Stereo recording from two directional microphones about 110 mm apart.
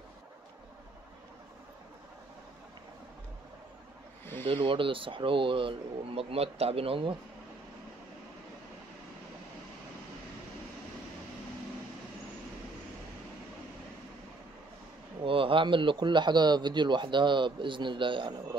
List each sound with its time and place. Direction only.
4.5 s speech: 55° right (ahead or behind)
15.2 s speech: 55° right (ahead or behind)